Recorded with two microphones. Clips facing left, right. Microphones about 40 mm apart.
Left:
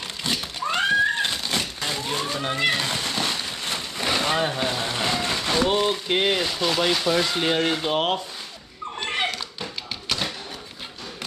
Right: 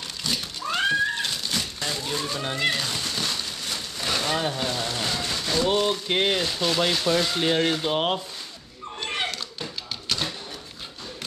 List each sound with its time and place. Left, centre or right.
0.2 s cat: left
1.8 s a sound: left
2.4 s speech: centre
2.7 s a sound: left
5.7 s speech: centre
9.1 s cat: centre